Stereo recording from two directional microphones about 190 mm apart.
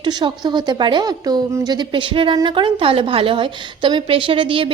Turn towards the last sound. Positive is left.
turn(degrees=-25)  # may be behind; listen again after turning